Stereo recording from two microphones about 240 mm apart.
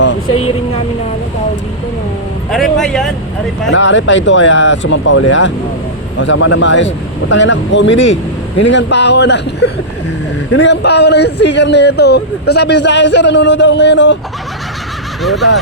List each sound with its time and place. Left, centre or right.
0.0 s vehicle: left
2.5 s speech: centre
3.7 s a man's voice: left
15.2 s speech: centre